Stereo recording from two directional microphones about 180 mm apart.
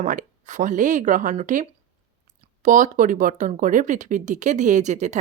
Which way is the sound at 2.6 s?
45° right (ahead or behind).